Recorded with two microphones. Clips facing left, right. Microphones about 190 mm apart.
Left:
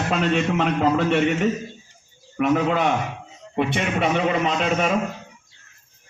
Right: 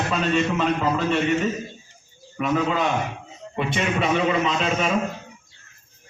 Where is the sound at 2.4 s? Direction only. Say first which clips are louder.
Left 3 dB; 65° left (ahead or behind).